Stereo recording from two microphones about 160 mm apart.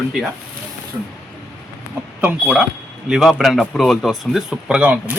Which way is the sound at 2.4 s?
Centre (ahead or behind).